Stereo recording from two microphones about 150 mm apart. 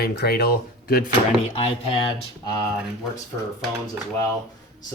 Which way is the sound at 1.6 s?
40° left (ahead or behind).